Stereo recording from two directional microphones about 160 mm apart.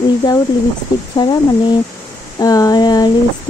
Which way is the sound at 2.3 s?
25° left (ahead or behind).